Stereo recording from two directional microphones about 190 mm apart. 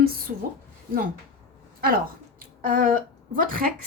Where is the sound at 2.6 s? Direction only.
45° right (ahead or behind).